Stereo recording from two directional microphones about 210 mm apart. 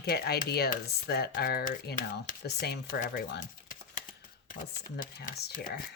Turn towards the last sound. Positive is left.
turn(degrees=40)  # may be behind; listen again after turning